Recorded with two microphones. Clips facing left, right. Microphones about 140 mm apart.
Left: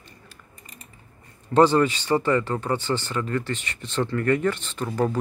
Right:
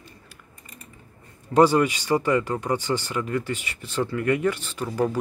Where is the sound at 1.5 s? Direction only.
10° right (ahead or behind).